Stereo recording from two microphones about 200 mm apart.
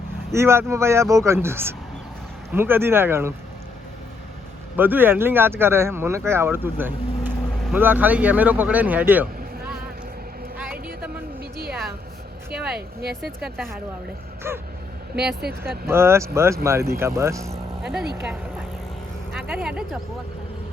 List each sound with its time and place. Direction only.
0.3 s speech: 15° right (ahead or behind)
4.8 s speech: 10° right (ahead or behind)
12.5 s speech: 5° right (ahead or behind)
13.0 s speech: 55° right (ahead or behind)
13.4 s speech: centre (ahead or behind)
14.5 s speech: 10° right (ahead or behind)
15.4 s speech: 55° right (ahead or behind)
15.9 s speech: 10° right (ahead or behind)
18.1 s speech: 5° right (ahead or behind)